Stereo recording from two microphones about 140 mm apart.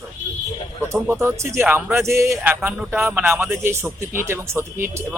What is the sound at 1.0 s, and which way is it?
A man's voice, 15° right (ahead or behind).